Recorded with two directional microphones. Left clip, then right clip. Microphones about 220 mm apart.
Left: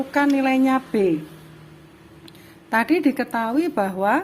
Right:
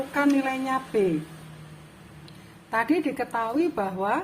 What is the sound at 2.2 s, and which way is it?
A woman's voice, 40° left (ahead or behind).